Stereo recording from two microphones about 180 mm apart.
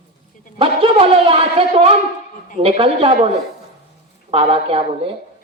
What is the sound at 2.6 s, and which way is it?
Speech, 30° right (ahead or behind).